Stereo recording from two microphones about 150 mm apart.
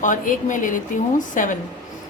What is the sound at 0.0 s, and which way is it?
A woman's voice, 60° left (ahead or behind).